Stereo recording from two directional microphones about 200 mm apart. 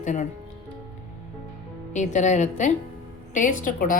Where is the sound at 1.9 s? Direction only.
35° left (ahead or behind).